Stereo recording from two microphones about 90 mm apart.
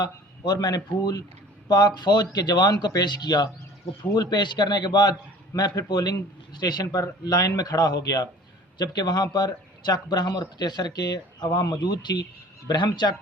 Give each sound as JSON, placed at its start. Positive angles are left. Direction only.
{"t": 0.0, "sound": "a man's voice", "side_deg": 50}